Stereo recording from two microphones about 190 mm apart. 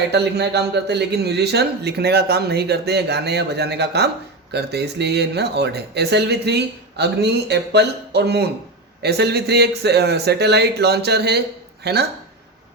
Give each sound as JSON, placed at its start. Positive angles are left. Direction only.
{"t": 0.1, "sound": "speech", "side_deg": -60}